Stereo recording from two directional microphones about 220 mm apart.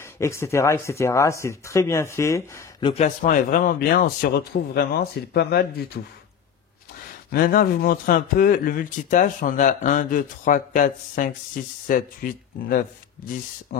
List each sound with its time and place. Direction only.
0.0 s speech: 10° left (ahead or behind)
2.9 s speech: 35° left (ahead or behind)
7.2 s speech: 40° left (ahead or behind)